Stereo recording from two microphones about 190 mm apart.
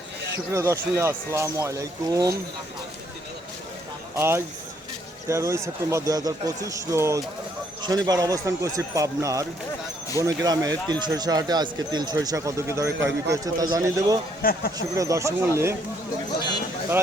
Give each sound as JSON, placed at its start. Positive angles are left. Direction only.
{"t": 0.5, "sound": "speech", "side_deg": -15}
{"t": 4.1, "sound": "speech", "side_deg": -15}
{"t": 13.0, "sound": "speech", "side_deg": -75}
{"t": 13.3, "sound": "speech", "side_deg": -20}
{"t": 14.4, "sound": "speech", "side_deg": 50}
{"t": 14.8, "sound": "speech", "side_deg": -15}